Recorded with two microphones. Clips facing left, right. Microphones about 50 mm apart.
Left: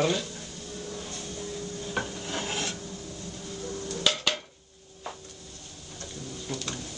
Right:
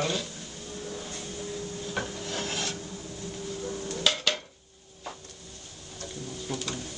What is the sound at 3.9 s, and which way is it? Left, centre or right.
Dishes, centre.